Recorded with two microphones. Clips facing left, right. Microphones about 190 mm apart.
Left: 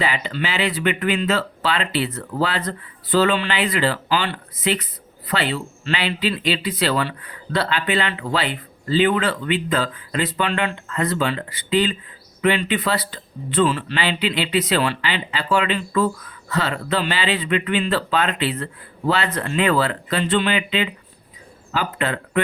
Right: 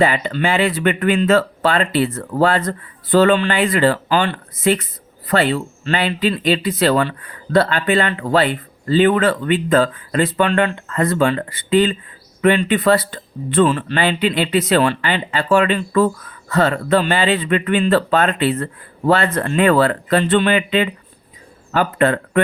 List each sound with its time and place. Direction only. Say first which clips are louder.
0.0 s a man's voice: right 7 dB; 50° right (ahead or behind)